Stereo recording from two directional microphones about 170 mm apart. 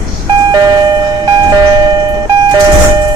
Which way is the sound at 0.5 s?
25° right (ahead or behind).